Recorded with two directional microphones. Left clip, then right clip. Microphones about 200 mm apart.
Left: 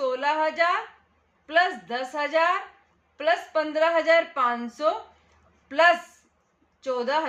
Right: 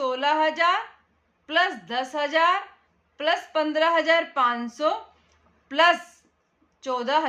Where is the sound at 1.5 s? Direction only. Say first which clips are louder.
Left 1 dB; 25° right (ahead or behind).